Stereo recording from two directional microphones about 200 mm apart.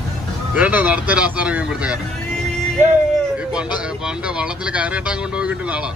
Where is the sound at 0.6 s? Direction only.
10° right (ahead or behind).